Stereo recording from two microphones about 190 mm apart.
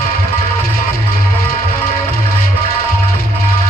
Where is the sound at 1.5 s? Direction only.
50° left (ahead or behind).